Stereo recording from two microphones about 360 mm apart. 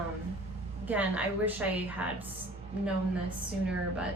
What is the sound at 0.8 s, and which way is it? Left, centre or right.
A woman's voice, centre.